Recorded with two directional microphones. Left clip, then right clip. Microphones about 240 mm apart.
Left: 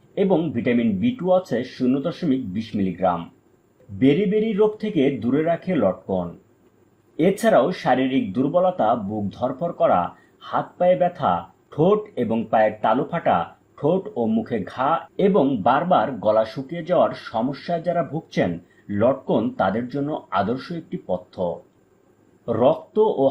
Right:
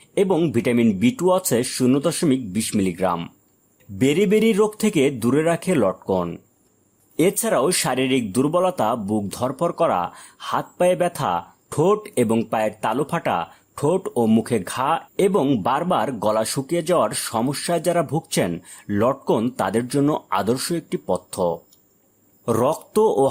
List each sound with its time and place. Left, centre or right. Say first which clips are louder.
0.1 s speech: right 2 dB; right